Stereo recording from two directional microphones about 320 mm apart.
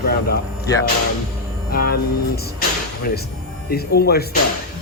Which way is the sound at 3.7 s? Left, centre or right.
Left.